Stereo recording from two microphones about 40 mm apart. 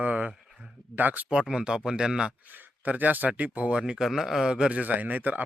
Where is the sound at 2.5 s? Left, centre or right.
Right.